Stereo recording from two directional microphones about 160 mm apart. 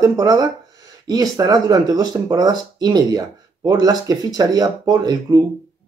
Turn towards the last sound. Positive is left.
turn(degrees=-25)  # may be behind; listen again after turning